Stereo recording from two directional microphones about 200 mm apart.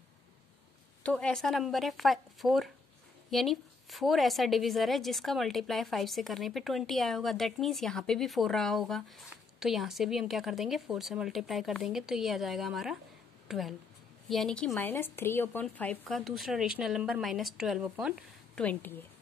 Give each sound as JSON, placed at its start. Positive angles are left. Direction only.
{"t": 1.0, "sound": "a woman's voice", "side_deg": 5}